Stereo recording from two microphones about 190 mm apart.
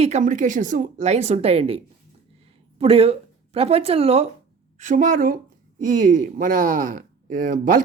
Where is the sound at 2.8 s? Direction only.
30° right (ahead or behind).